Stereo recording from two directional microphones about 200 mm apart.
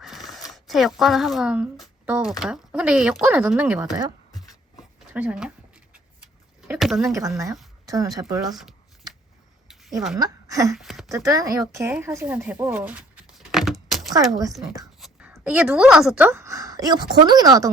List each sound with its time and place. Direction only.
0.0 s zipper: centre (ahead or behind)
0.5 s a woman's voice: centre (ahead or behind)
4.3 s writing: 20° left (ahead or behind)
4.8 s dog: 5° right (ahead or behind)
6.7 s speech: centre (ahead or behind)
7.1 s a woman's voice: 15° right (ahead or behind)
8.4 s speech: centre (ahead or behind)
10.2 s a woman's voice: 15° right (ahead or behind)
10.7 s speech: centre (ahead or behind)
11.1 s a woman's voice: 15° right (ahead or behind)
11.7 s a sound: 10° right (ahead or behind)
15.3 s a woman's voice: 5° right (ahead or behind)